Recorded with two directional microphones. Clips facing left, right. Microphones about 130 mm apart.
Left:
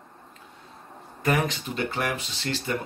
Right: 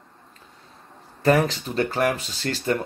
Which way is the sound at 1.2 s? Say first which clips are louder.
Right 6 dB; 35° right (ahead or behind).